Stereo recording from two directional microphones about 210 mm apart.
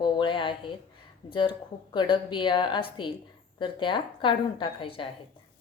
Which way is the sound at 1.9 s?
20° left (ahead or behind).